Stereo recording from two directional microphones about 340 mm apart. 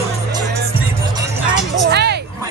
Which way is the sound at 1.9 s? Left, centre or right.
Right.